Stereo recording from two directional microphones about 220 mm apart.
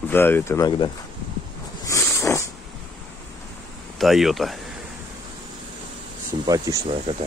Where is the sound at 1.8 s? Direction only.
15° left (ahead or behind).